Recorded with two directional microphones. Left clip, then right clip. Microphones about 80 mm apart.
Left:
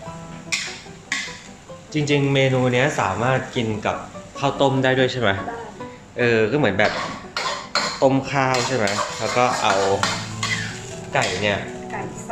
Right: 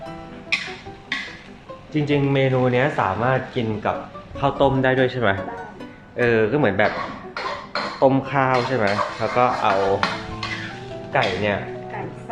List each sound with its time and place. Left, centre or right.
1.9 s speech: left
6.1 s cough: left
8.5 s speech: left
11.1 s a sound: left